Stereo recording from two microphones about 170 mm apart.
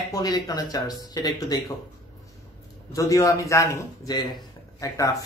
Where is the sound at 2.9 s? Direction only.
20° left (ahead or behind).